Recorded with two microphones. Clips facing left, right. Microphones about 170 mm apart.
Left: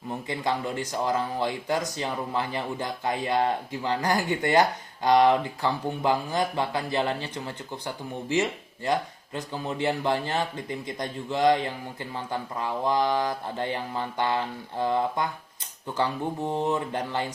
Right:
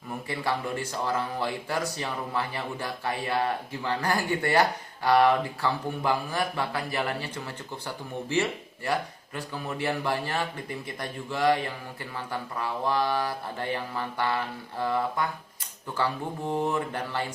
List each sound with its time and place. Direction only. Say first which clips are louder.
0.1 s speech: left 2 dB; 20° left (ahead or behind)
16.5 s speech: right 1 dB; 20° left (ahead or behind)